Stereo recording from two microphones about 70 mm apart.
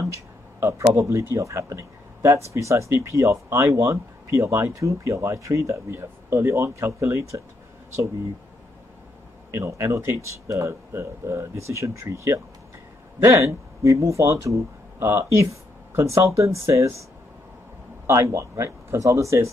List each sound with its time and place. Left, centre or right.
0.6 s speech: right
9.5 s speech: right
18.0 s speech: right